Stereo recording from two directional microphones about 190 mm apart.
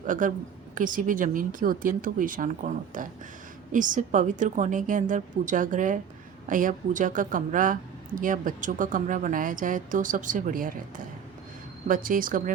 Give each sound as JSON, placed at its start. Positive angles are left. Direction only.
{"t": 0.0, "sound": "speech", "side_deg": -45}